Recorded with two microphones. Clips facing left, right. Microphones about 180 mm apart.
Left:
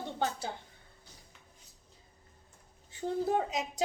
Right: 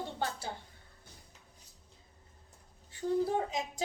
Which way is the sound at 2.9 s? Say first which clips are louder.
Even; 20° left (ahead or behind).